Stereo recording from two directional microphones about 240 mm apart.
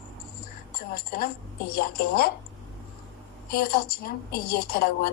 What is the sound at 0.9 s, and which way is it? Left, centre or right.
Speech, left.